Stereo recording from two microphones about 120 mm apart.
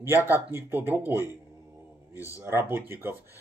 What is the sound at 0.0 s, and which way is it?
Speech, 20° right (ahead or behind).